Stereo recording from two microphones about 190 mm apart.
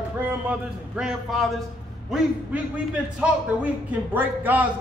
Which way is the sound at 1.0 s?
Centre (ahead or behind).